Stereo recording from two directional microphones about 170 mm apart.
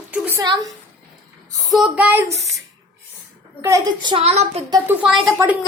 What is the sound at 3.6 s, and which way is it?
A woman's voice, 20° right (ahead or behind).